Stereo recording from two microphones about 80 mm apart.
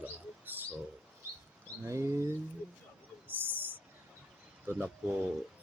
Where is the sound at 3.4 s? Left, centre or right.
Right.